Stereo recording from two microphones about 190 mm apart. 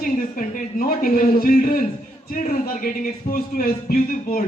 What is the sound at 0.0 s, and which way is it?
A man's voice, 45° left (ahead or behind).